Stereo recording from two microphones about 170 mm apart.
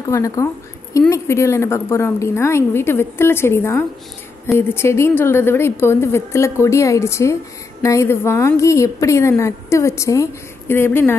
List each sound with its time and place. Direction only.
0.1 s a woman's voice: 20° left (ahead or behind)